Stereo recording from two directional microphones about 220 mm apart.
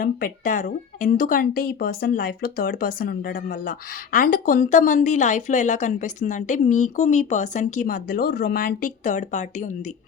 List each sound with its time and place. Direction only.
0.0 s speech: 40° left (ahead or behind)